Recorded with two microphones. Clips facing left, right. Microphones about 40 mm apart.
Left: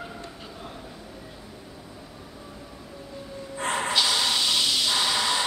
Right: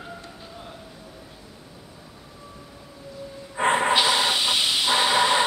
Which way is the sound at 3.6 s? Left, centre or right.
Right.